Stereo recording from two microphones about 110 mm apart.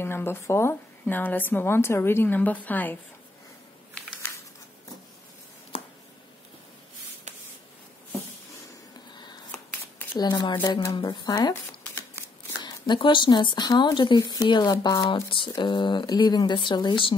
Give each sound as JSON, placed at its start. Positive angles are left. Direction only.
{"t": 0.0, "sound": "a woman's voice", "side_deg": 20}
{"t": 4.0, "sound": "a sound", "side_deg": 10}
{"t": 9.1, "sound": "a sound", "side_deg": 40}
{"t": 9.5, "sound": "shuffling cards", "side_deg": 20}
{"t": 10.1, "sound": "speech", "side_deg": 40}
{"t": 12.6, "sound": "speech", "side_deg": 45}